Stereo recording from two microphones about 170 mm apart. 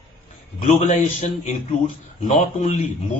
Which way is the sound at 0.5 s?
40° left (ahead or behind).